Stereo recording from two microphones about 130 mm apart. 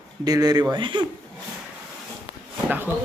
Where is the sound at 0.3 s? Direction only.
30° right (ahead or behind).